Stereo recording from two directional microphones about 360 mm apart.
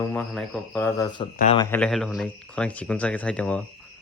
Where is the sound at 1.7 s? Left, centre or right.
Centre.